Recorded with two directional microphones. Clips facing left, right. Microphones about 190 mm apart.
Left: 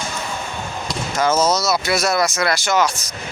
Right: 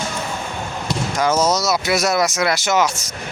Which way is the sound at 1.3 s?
Centre (ahead or behind).